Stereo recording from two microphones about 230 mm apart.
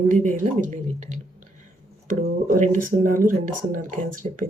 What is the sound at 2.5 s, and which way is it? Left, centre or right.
Speech, right.